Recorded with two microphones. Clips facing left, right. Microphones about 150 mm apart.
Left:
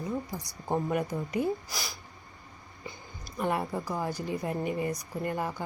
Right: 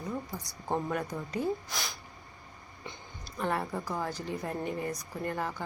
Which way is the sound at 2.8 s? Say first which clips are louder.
Left 2 dB; 10° left (ahead or behind).